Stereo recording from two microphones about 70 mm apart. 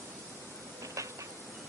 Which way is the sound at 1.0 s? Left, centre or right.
Right.